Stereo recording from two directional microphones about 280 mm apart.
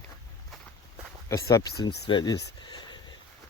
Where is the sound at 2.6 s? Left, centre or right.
Centre.